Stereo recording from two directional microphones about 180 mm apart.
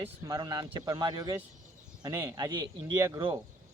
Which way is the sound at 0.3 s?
20° right (ahead or behind).